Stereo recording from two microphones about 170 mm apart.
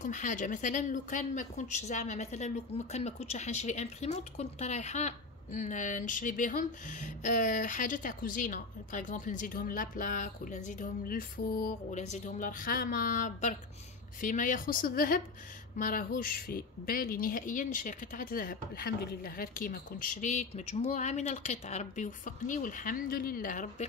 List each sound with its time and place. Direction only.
0.0 s a woman's voice: 45° left (ahead or behind)
11.9 s a woman's voice: 45° left (ahead or behind)